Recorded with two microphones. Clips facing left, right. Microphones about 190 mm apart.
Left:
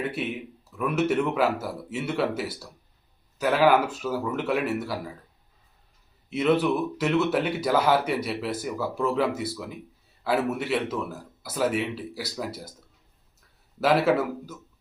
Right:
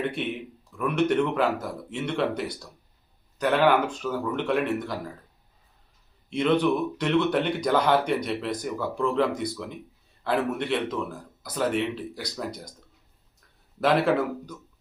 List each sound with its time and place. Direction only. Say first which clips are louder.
0.0 s speech: right 1 dB; 5° left (ahead or behind)
6.3 s speech: even; 5° left (ahead or behind)
13.8 s speech: left 1 dB; 5° left (ahead or behind)